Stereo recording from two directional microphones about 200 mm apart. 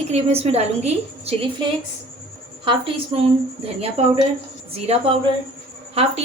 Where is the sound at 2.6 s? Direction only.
25° right (ahead or behind).